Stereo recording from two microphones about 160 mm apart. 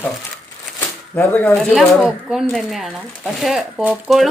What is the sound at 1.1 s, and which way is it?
Speech, 10° left (ahead or behind).